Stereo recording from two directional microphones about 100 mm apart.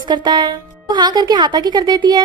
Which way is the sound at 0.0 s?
50° right (ahead or behind).